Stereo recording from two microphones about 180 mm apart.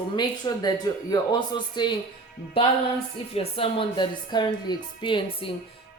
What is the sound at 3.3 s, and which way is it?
A man's voice, 30° left (ahead or behind).